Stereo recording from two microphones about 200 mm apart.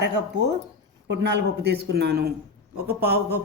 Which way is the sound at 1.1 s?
60° right (ahead or behind).